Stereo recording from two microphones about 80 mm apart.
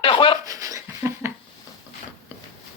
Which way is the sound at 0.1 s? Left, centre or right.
Left.